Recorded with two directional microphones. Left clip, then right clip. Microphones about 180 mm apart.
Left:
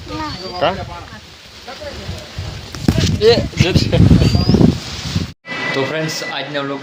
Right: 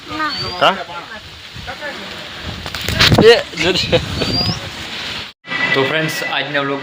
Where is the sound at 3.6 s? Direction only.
25° right (ahead or behind).